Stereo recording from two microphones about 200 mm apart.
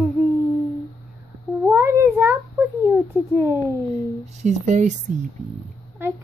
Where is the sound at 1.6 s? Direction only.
10° right (ahead or behind).